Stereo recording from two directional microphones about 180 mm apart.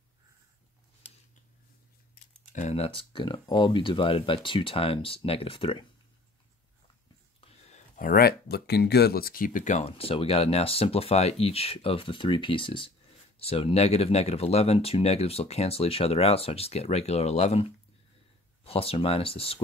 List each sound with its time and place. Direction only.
1.0 s a sound: 10° left (ahead or behind)
2.5 s speech: 40° left (ahead or behind)
7.3 s speech: 35° left (ahead or behind)